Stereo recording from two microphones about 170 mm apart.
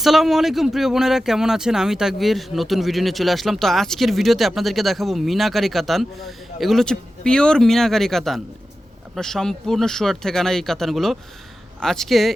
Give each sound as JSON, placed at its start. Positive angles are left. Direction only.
{"t": 0.0, "sound": "speech", "side_deg": 0}